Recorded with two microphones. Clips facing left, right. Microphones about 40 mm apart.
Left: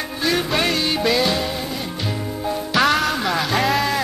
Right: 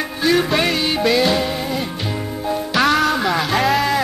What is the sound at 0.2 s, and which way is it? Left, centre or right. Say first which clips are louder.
Music: right 4 dB; centre.